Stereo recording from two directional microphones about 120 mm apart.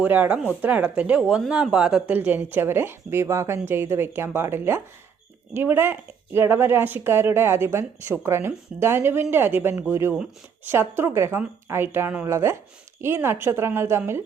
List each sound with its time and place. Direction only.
0.0 s speech: 15° right (ahead or behind)